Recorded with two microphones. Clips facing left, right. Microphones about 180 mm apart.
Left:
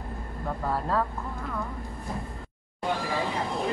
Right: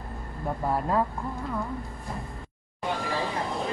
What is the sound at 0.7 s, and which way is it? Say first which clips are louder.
Speech: right 2 dB; 15° right (ahead or behind).